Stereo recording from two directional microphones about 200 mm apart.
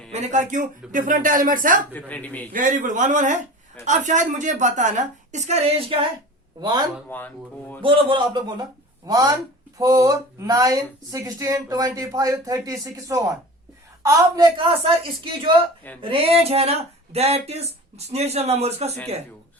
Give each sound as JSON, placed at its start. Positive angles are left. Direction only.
{"t": 0.1, "sound": "speech", "side_deg": -35}
{"t": 1.9, "sound": "speech", "side_deg": 10}
{"t": 2.5, "sound": "a woman's voice", "side_deg": -40}
{"t": 7.1, "sound": "speech", "side_deg": 10}
{"t": 7.8, "sound": "a woman's voice", "side_deg": -25}